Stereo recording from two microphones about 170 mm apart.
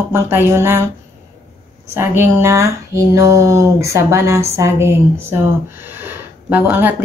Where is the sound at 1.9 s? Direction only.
15° right (ahead or behind).